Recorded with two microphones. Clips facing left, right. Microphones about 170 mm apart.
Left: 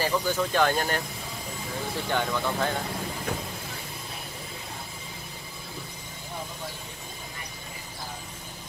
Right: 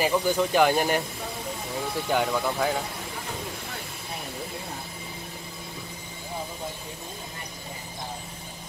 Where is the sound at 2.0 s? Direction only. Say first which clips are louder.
Right 3 dB; 10° right (ahead or behind).